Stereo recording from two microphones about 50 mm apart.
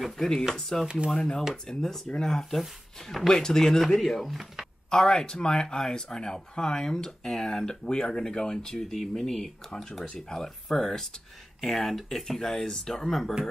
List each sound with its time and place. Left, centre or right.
0.0 s speech: centre
0.8 s speech: centre
1.1 s speech: centre
4.8 s speech: centre